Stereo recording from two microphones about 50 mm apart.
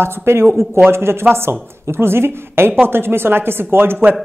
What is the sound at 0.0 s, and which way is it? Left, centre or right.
Speech, right.